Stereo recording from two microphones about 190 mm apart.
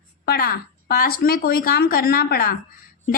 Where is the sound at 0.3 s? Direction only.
55° left (ahead or behind).